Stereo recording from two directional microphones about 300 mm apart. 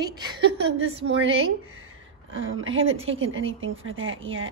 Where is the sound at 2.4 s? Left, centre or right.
Right.